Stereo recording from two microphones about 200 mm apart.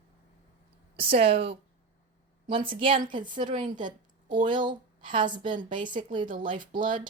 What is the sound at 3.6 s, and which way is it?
Speech, 40° right (ahead or behind).